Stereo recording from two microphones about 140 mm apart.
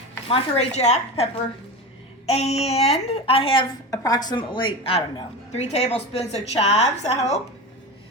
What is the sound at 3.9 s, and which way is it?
A woman's voice, 25° left (ahead or behind).